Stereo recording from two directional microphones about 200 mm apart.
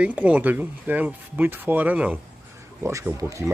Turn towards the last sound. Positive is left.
turn(degrees=-15)  # may be behind; listen again after turning